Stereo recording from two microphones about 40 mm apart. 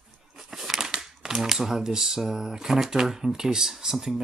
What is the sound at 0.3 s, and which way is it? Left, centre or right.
Speech, centre.